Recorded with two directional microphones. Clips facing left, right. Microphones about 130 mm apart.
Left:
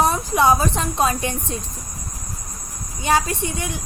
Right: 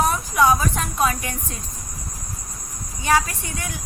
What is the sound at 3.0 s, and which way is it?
Speech, 25° left (ahead or behind).